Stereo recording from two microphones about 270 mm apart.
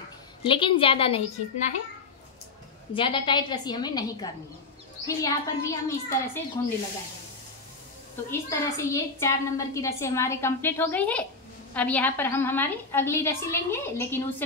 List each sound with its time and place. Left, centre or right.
0.5 s a woman's voice: centre
2.9 s a woman's voice: centre
8.3 s a woman's voice: centre